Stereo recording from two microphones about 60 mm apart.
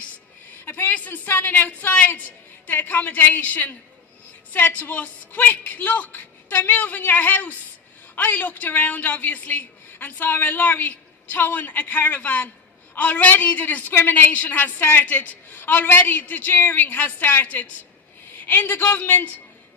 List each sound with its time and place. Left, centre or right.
0.6 s a man's voice: left